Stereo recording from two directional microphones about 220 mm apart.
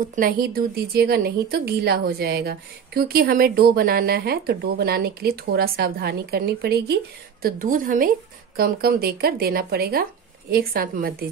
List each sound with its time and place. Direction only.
0.1 s a woman's voice: 40° right (ahead or behind)